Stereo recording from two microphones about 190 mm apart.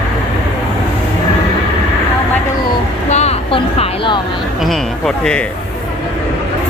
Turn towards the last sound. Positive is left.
turn(degrees=5)  # may be behind; listen again after turning